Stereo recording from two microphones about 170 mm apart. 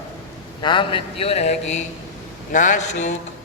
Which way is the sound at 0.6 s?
30° left (ahead or behind).